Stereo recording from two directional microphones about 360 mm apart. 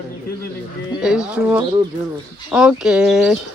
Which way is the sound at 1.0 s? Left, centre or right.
Centre.